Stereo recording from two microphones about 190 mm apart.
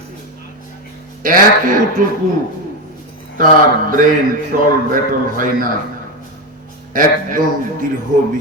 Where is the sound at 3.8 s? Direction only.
45° right (ahead or behind).